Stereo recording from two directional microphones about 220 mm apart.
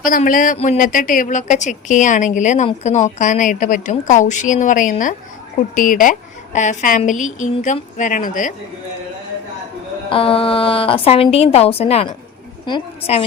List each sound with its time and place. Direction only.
0.0 s a woman's voice: 40° left (ahead or behind)
10.1 s a woman's voice: 25° left (ahead or behind)